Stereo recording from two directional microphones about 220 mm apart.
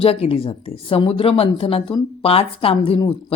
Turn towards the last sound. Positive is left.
turn(degrees=25)  # may be behind; listen again after turning